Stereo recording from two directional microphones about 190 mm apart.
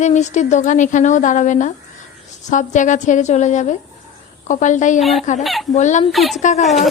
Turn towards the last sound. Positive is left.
turn(degrees=40)  # may be behind; listen again after turning